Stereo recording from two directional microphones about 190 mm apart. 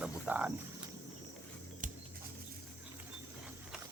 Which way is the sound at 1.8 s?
45° right (ahead or behind).